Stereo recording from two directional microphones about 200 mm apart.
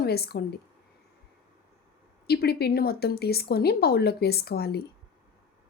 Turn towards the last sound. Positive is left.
turn(degrees=50)  # may be behind; listen again after turning